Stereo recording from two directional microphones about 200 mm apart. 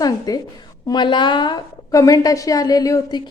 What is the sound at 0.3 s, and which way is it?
A woman's voice, 20° left (ahead or behind).